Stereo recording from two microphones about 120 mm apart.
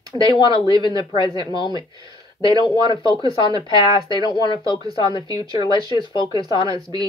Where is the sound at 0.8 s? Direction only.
40° left (ahead or behind).